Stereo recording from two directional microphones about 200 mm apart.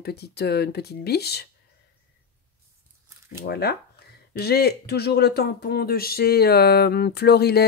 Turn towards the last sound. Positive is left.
turn(degrees=55)  # may be behind; listen again after turning